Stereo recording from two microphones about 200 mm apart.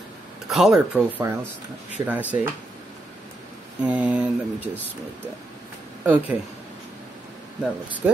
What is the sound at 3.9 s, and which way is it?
Speech, 5° right (ahead or behind).